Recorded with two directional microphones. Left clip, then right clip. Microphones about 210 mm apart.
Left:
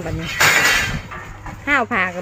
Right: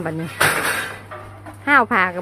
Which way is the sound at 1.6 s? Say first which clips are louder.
Right 3 dB; 10° right (ahead or behind).